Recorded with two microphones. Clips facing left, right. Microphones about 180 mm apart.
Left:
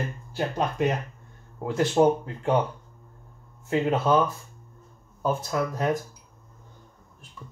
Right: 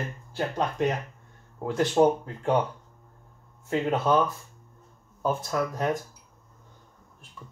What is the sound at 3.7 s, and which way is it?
Speech, 5° left (ahead or behind).